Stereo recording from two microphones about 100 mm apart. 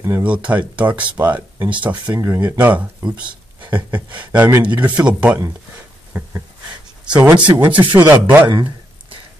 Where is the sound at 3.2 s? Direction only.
50° right (ahead or behind).